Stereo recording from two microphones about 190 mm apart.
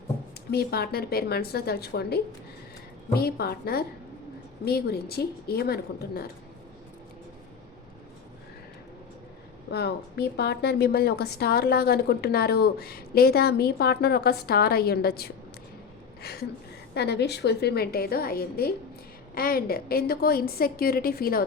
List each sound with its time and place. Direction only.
0.5 s a woman's voice: 55° left (ahead or behind)
9.6 s a woman's voice: 60° left (ahead or behind)
16.2 s a sound: 55° left (ahead or behind)
16.9 s a woman's voice: 60° left (ahead or behind)